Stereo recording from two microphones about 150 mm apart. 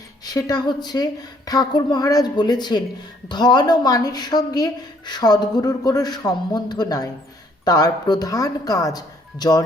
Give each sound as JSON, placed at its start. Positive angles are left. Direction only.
{"t": 0.3, "sound": "a woman's voice", "side_deg": 25}